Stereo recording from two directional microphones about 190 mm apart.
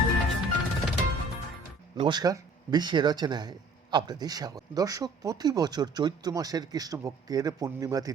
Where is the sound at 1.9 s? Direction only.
25° right (ahead or behind).